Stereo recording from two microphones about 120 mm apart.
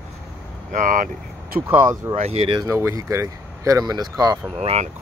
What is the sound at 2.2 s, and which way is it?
Speech, 55° right (ahead or behind).